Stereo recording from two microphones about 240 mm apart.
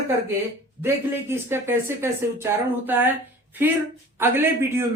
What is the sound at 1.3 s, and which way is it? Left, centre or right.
Speech, centre.